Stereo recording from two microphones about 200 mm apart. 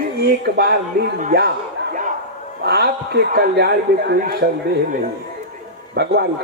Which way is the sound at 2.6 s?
55° right (ahead or behind).